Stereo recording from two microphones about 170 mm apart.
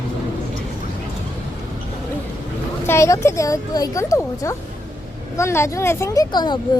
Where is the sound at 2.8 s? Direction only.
15° left (ahead or behind).